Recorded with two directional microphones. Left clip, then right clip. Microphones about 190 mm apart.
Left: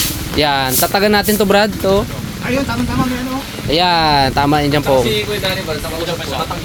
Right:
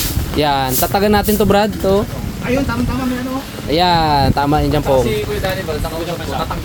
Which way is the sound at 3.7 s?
10° right (ahead or behind).